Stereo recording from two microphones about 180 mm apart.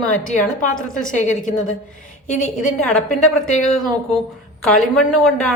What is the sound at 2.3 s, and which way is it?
Speech, 45° left (ahead or behind).